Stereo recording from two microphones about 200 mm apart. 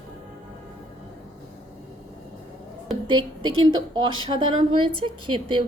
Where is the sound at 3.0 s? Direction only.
25° right (ahead or behind).